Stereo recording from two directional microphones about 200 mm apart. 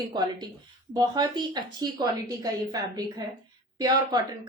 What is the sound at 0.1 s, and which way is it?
A woman's voice, 20° right (ahead or behind).